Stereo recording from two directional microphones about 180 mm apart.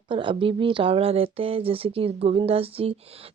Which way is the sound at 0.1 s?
25° right (ahead or behind).